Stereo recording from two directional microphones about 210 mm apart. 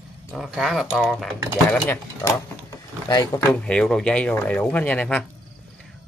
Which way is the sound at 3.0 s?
15° left (ahead or behind).